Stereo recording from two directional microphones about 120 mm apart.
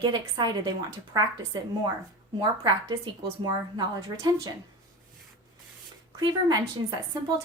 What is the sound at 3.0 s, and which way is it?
Speech, 40° right (ahead or behind).